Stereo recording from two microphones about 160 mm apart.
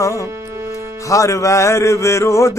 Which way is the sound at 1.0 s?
20° left (ahead or behind).